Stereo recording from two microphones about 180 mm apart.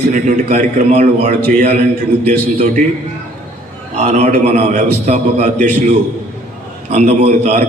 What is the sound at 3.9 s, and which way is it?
A man's voice, 40° right (ahead or behind).